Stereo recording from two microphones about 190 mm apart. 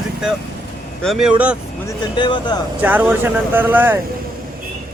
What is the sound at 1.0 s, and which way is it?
Speech, 5° right (ahead or behind).